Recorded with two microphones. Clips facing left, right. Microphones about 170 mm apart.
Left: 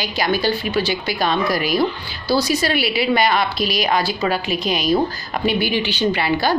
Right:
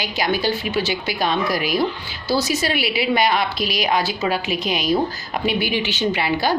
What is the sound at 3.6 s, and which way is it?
Speech, 40° left (ahead or behind).